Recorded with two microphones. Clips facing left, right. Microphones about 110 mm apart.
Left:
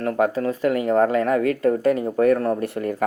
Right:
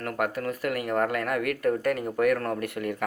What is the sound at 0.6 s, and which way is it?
Speech, 25° left (ahead or behind).